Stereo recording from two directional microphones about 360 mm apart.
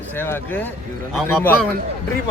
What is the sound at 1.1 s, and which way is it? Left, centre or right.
Speech, centre.